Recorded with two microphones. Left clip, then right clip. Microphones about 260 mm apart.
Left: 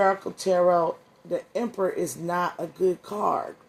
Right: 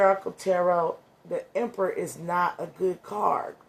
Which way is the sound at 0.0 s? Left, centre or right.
Left.